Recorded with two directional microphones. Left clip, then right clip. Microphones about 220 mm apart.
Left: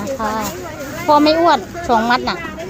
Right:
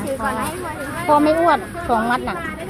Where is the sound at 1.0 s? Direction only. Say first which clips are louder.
Left 3 dB; 20° left (ahead or behind).